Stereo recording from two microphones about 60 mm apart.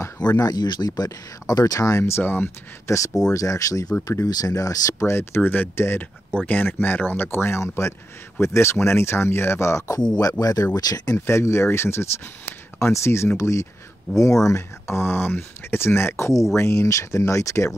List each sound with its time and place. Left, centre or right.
0.3 s speech: left
2.0 s speech: left
2.9 s speech: left
3.3 s speech: left
5.0 s speech: left
7.2 s speech: left
10.4 s speech: left
11.1 s speech: left
14.9 s speech: left